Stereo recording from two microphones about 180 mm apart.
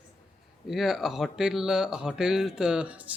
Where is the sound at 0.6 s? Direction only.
Centre (ahead or behind).